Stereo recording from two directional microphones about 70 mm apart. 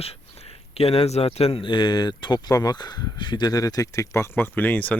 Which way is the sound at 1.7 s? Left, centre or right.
Left.